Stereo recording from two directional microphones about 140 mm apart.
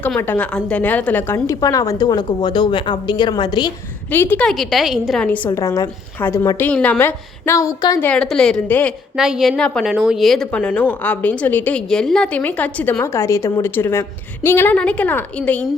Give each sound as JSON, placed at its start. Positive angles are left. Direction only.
{"t": 0.2, "sound": "a woman's voice", "side_deg": 10}
{"t": 4.1, "sound": "a woman's voice", "side_deg": 15}
{"t": 4.4, "sound": "a woman's voice", "side_deg": 0}
{"t": 5.2, "sound": "a woman's voice", "side_deg": 10}
{"t": 5.5, "sound": "a woman's voice", "side_deg": 20}
{"t": 6.7, "sound": "a woman's voice", "side_deg": 10}
{"t": 7.0, "sound": "a woman's voice", "side_deg": 20}
{"t": 8.0, "sound": "a woman's voice", "side_deg": 5}
{"t": 9.1, "sound": "a woman's voice", "side_deg": -5}